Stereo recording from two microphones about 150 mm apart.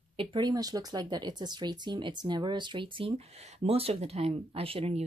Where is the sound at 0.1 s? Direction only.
35° right (ahead or behind).